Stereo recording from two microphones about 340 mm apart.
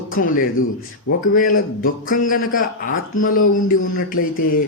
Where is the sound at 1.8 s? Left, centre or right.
Left.